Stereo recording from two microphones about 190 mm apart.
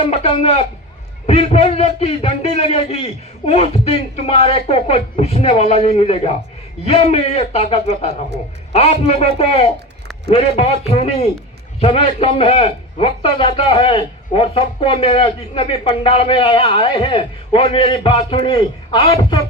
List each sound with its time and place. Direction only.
0.0 s a man's voice: 35° left (ahead or behind)